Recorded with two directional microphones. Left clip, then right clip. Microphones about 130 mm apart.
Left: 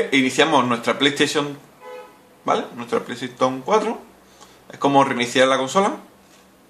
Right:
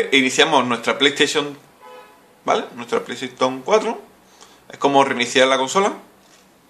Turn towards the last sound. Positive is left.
turn(degrees=-20)  # may be behind; listen again after turning